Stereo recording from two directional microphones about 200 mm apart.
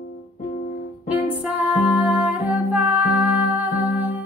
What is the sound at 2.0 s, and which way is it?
Music, 5° right (ahead or behind).